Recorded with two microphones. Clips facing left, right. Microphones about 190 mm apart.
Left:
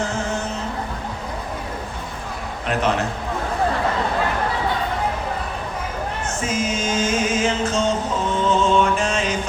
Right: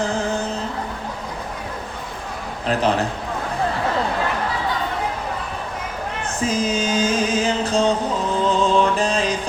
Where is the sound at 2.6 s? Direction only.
35° right (ahead or behind).